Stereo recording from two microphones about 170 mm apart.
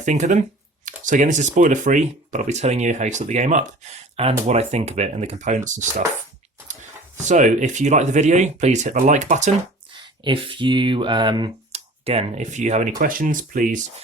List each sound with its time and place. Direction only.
0.0 s speech: 45° right (ahead or behind)
7.2 s speech: 45° right (ahead or behind)
9.9 s speech: 30° right (ahead or behind)
11.7 s speech: 40° right (ahead or behind)
13.0 s speech: 55° right (ahead or behind)